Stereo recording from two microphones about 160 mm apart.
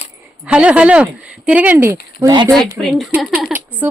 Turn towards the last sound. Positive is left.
turn(degrees=0)  # may be behind; listen again after turning